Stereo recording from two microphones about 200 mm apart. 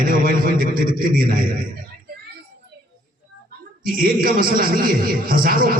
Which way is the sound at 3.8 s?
45° right (ahead or behind).